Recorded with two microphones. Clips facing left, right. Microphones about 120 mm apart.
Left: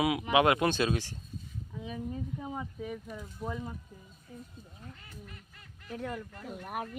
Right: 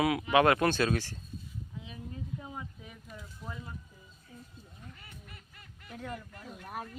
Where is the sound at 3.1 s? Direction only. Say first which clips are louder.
Left 7 dB; 50° left (ahead or behind).